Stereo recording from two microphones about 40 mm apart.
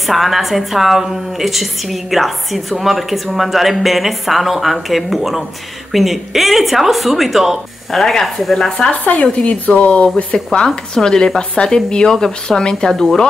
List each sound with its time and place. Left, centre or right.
0.0 s a woman's voice: centre
7.9 s a woman's voice: centre
9.2 s speech: left; by 13.3 s centre